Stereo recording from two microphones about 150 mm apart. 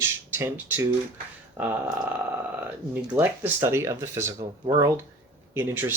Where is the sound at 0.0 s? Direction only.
15° right (ahead or behind).